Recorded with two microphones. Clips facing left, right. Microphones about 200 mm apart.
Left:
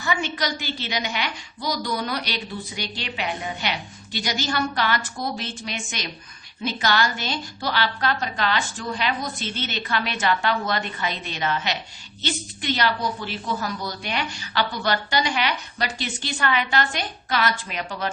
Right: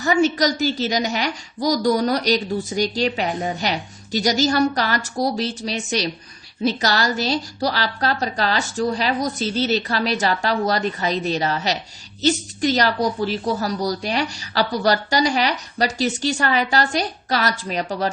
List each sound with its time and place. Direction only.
0.0 s a woman's voice: 40° right (ahead or behind)